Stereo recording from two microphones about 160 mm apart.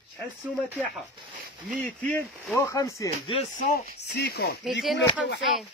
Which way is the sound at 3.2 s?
35° left (ahead or behind).